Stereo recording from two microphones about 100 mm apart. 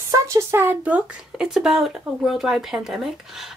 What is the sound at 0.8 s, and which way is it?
Speech, 15° right (ahead or behind).